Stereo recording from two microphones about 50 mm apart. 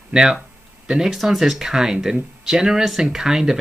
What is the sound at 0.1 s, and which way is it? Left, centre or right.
Speech, centre.